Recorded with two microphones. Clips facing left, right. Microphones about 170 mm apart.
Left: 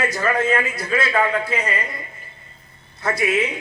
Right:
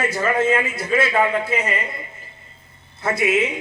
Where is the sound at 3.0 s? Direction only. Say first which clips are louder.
Right 1 dB; 25° right (ahead or behind).